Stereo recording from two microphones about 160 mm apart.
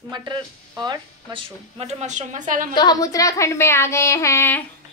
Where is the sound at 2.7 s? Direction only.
25° left (ahead or behind).